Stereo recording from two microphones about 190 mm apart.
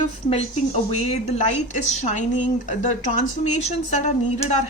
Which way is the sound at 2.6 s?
40° left (ahead or behind).